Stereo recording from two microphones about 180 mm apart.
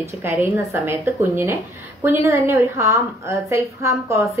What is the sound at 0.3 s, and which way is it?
A woman's voice, 15° right (ahead or behind).